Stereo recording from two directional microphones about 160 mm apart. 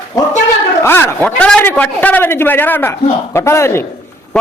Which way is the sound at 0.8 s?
15° left (ahead or behind).